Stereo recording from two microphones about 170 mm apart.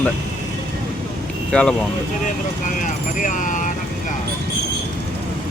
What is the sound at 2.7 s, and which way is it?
Speech, 50° left (ahead or behind).